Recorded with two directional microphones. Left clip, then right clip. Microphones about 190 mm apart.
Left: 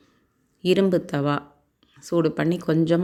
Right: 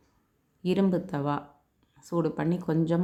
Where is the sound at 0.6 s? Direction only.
10° left (ahead or behind).